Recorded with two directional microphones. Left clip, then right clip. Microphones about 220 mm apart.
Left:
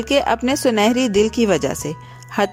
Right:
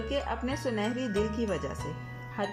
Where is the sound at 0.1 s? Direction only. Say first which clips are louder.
Left 17 dB; 45° left (ahead or behind).